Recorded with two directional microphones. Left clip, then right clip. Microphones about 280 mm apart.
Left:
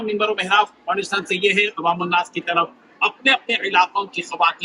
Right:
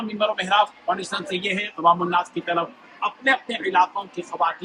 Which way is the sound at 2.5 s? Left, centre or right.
Centre.